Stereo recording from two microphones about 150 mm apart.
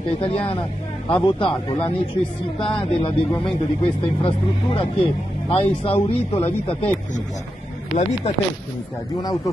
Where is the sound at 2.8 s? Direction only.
35° left (ahead or behind).